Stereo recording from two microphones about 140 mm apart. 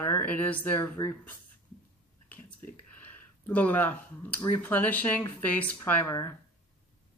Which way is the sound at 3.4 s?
10° left (ahead or behind).